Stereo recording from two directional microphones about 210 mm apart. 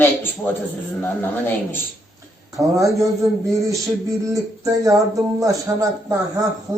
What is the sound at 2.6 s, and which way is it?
Speech, 15° right (ahead or behind).